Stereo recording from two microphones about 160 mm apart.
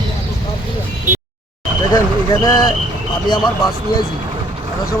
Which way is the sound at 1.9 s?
25° left (ahead or behind).